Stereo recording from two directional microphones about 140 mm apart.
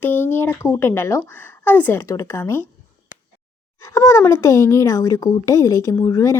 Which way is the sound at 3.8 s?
20° left (ahead or behind).